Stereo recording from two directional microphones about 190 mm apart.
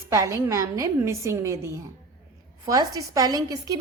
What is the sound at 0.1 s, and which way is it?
A woman's voice, 15° right (ahead or behind).